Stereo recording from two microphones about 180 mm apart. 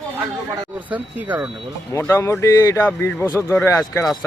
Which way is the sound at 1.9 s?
15° left (ahead or behind).